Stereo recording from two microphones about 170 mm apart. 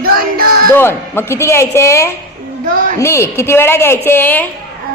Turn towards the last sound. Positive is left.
turn(degrees=10)  # may be behind; listen again after turning